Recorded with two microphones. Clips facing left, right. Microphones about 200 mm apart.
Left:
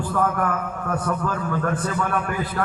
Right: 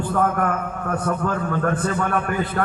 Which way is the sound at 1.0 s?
45° right (ahead or behind).